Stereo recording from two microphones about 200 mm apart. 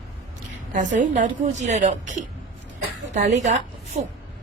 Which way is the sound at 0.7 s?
40° right (ahead or behind).